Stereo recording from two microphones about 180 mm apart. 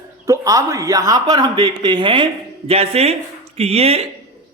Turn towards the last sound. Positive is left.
turn(degrees=-35)  # may be behind; listen again after turning